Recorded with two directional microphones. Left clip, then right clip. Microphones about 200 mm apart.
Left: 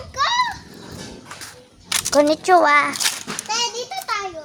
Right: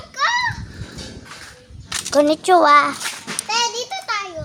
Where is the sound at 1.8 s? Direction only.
55° left (ahead or behind).